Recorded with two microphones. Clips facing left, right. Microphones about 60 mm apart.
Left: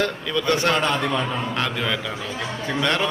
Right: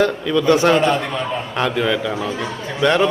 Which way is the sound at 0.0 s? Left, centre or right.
Centre.